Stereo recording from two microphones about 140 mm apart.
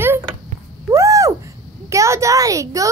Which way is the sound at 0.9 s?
20° right (ahead or behind).